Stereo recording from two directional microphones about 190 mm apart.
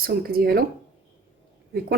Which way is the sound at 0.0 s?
50° right (ahead or behind).